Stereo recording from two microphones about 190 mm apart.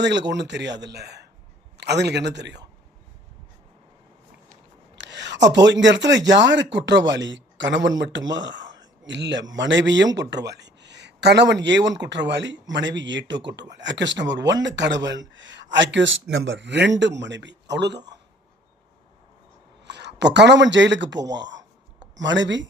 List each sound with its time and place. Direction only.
0.3 s speech: 65° right (ahead or behind)
4.9 s a sound: 70° right (ahead or behind)
5.8 s speech: 70° right (ahead or behind)
19.8 s speech: 65° right (ahead or behind)